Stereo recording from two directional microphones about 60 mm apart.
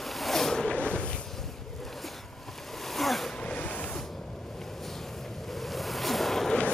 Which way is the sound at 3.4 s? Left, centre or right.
Left.